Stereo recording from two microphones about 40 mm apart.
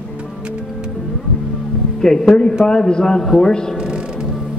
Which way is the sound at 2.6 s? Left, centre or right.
Centre.